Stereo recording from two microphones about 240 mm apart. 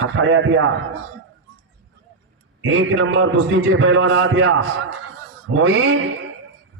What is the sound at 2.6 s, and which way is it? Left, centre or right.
A man's voice, right.